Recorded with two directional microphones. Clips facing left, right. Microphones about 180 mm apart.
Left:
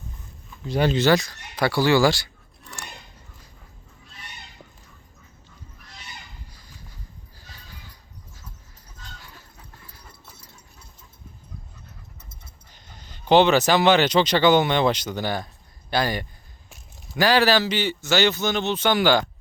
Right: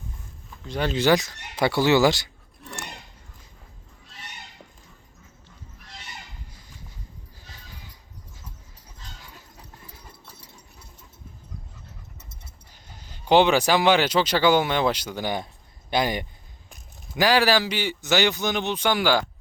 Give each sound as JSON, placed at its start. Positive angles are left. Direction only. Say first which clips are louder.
{"t": 0.6, "sound": "speech", "louder": "left 5 dB", "side_deg": 5}
{"t": 0.9, "sound": "speech", "louder": "left 1 dB", "side_deg": -15}
{"t": 12.9, "sound": "speech", "louder": "left 1 dB", "side_deg": -10}